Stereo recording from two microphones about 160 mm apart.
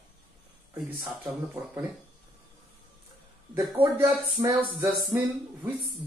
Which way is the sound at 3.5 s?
15° right (ahead or behind).